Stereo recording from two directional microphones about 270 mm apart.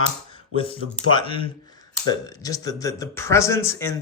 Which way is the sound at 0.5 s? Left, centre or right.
Left.